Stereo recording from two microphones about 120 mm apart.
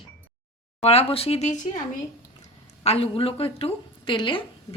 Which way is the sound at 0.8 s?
55° left (ahead or behind).